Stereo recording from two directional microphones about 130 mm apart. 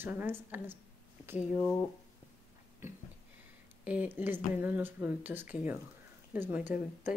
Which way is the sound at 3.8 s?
10° right (ahead or behind).